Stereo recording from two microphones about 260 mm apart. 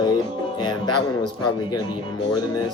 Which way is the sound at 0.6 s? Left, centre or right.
Centre.